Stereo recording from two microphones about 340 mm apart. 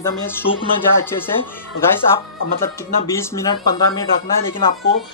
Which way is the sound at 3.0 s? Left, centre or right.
Centre.